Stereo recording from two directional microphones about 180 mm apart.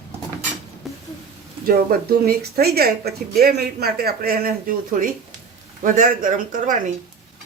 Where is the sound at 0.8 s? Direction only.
Centre (ahead or behind).